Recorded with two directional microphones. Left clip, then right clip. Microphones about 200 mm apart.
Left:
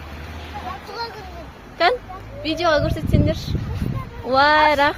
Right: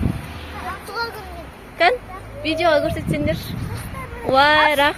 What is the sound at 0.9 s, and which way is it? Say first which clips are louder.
Speech: right 6 dB; centre (ahead or behind).